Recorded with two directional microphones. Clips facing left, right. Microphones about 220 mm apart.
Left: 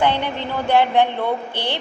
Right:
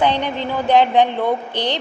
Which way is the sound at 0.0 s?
15° right (ahead or behind).